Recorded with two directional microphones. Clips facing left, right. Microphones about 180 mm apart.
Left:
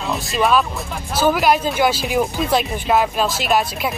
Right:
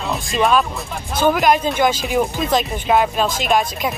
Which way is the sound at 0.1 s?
Centre (ahead or behind).